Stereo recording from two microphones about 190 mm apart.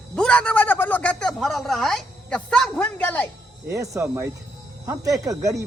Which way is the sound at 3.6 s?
15° right (ahead or behind).